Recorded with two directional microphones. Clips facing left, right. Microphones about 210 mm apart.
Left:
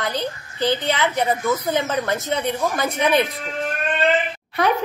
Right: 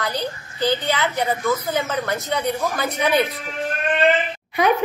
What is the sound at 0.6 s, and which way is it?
Speech, 20° left (ahead or behind).